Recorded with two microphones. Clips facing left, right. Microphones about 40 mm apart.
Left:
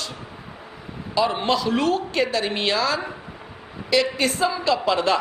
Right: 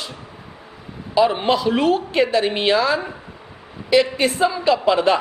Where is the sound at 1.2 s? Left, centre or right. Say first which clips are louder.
Right 4 dB; centre.